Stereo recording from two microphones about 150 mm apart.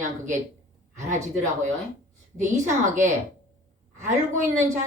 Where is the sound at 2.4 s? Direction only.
55° right (ahead or behind).